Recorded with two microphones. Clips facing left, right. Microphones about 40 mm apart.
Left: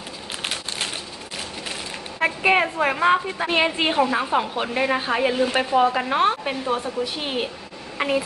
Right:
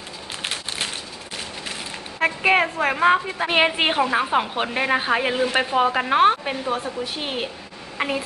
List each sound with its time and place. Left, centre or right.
0.4 s crumpling: centre
2.1 s speech: centre
3.4 s a woman's voice: right
6.4 s speech: centre